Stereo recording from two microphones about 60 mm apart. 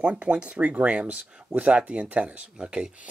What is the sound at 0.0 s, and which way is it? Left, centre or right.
Speech, right.